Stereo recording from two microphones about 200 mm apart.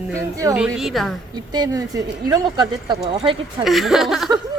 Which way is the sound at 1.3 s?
20° right (ahead or behind).